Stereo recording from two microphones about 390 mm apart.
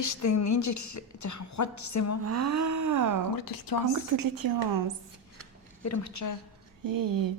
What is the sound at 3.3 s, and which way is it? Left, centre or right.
Speech, left.